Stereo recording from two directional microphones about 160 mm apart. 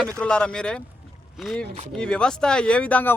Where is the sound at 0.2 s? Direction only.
5° left (ahead or behind).